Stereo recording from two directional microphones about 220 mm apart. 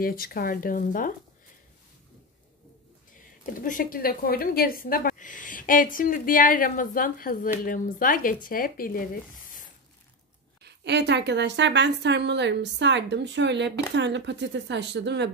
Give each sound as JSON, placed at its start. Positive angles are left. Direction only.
{"t": 0.0, "sound": "a woman's voice", "side_deg": 40}
{"t": 3.5, "sound": "a woman's voice", "side_deg": 35}
{"t": 10.6, "sound": "a woman's voice", "side_deg": -50}